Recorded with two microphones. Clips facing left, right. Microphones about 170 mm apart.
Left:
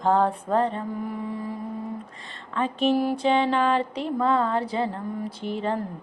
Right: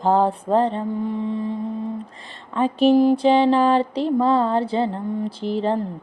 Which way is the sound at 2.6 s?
35° right (ahead or behind).